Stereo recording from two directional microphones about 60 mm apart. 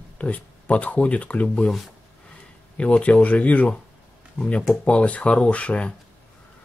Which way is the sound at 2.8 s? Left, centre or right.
Left.